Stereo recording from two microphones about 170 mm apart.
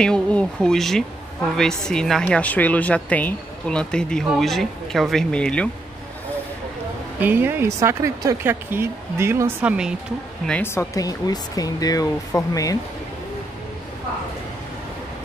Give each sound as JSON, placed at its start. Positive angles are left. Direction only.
{"t": 0.0, "sound": "a woman's voice", "side_deg": 5}
{"t": 7.2, "sound": "speech", "side_deg": -10}
{"t": 10.4, "sound": "speech", "side_deg": 10}